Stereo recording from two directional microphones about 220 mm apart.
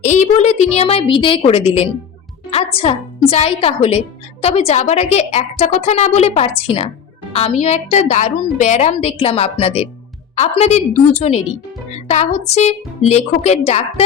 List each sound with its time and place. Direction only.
0.0 s a woman's voice: 35° left (ahead or behind)